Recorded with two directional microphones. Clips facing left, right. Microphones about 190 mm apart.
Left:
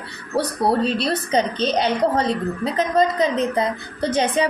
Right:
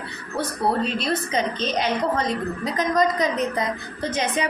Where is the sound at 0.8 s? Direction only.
35° left (ahead or behind).